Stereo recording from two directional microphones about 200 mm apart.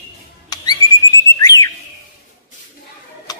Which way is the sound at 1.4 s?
20° left (ahead or behind).